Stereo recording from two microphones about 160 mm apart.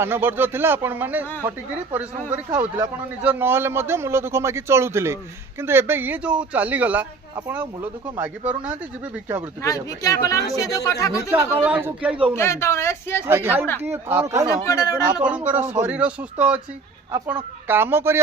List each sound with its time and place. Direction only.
0.0 s speech: 15° right (ahead or behind)
9.6 s speech: 20° left (ahead or behind)
11.3 s speech: 10° right (ahead or behind)
12.4 s speech: 15° left (ahead or behind)
13.2 s speech: 15° right (ahead or behind)
14.7 s speech: 20° left (ahead or behind)
15.2 s speech: 10° right (ahead or behind)